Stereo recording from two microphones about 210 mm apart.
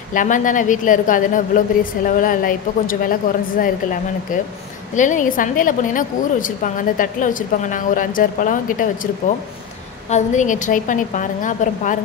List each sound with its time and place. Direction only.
0.1 s a woman's voice: 40° left (ahead or behind)